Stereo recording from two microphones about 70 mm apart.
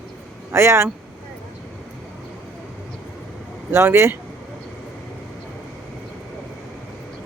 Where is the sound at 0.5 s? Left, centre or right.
Right.